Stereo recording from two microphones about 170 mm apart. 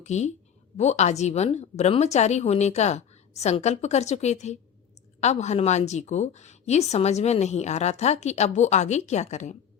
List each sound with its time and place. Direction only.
0.0 s a woman's voice: 40° left (ahead or behind)